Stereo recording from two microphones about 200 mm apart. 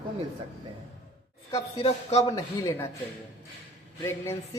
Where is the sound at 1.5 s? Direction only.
30° left (ahead or behind).